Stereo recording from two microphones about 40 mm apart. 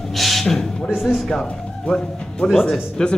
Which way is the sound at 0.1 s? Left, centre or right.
Centre.